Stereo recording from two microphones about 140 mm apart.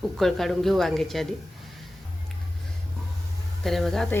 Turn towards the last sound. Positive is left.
turn(degrees=0)  # may be behind; listen again after turning